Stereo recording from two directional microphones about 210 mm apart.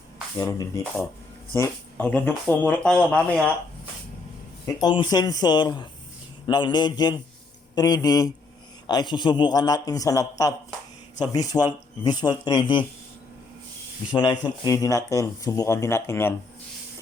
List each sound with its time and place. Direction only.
0.3 s speech: 15° left (ahead or behind)
4.6 s a man's voice: 20° left (ahead or behind)
14.1 s speech: 20° left (ahead or behind)